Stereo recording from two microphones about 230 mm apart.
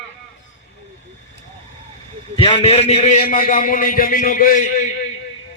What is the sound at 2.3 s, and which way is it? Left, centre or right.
A man's voice, left.